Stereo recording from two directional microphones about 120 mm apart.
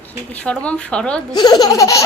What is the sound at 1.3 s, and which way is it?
Laughter, 35° left (ahead or behind).